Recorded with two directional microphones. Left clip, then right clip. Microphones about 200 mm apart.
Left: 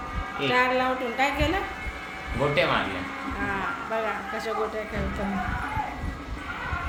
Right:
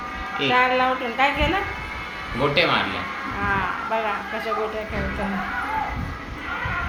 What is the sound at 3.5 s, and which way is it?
Speech, 15° left (ahead or behind).